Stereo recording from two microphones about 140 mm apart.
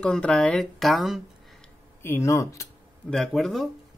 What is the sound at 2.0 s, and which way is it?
Speech, 20° left (ahead or behind).